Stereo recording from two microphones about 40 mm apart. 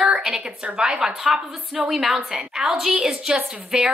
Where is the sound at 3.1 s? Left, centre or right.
Centre.